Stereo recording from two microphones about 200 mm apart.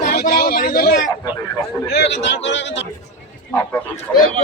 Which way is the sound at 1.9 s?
60° left (ahead or behind).